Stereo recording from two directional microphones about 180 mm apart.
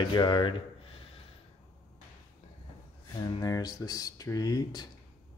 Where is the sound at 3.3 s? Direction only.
20° left (ahead or behind).